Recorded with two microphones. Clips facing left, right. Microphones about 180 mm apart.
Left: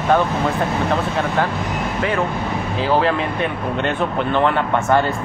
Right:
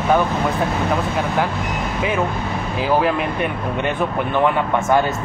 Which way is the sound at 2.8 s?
10° right (ahead or behind).